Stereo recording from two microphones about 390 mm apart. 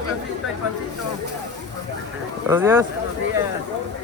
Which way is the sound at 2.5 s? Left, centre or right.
Centre.